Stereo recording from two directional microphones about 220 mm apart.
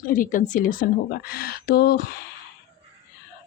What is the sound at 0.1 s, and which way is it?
A woman's voice, 35° left (ahead or behind).